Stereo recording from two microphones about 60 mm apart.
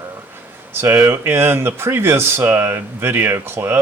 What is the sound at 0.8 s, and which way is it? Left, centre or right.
Speech, right.